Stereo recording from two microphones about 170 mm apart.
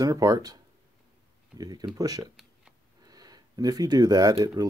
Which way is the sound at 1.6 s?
20° right (ahead or behind).